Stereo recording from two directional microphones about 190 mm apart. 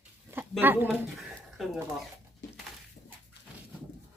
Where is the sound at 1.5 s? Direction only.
Centre (ahead or behind).